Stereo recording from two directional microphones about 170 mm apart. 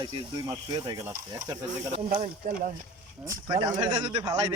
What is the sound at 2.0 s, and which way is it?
Speech, 50° right (ahead or behind).